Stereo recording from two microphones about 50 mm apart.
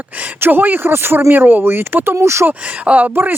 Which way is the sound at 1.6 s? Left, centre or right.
Right.